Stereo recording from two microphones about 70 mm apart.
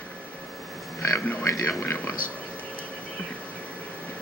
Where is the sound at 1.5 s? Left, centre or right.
Left.